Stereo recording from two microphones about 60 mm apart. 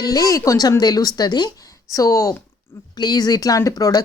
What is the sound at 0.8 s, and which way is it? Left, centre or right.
Speech, left.